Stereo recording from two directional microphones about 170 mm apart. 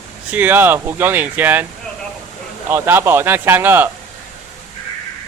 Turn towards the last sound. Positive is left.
turn(degrees=-10)  # may be behind; listen again after turning